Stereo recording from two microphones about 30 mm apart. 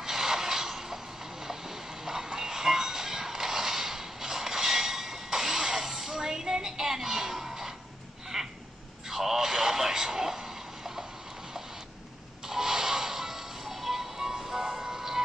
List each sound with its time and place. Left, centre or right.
0.0 s a sound: centre
1.4 s train: centre
7.4 s music: centre
8.3 s a sound: centre
9.1 s radio: centre
12.4 s music: centre
14.1 s music: centre